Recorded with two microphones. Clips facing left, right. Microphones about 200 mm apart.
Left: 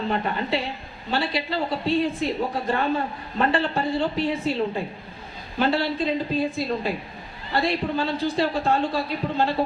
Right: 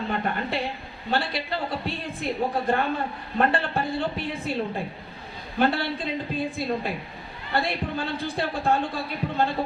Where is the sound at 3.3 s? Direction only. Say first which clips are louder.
Left 1 dB; 55° right (ahead or behind).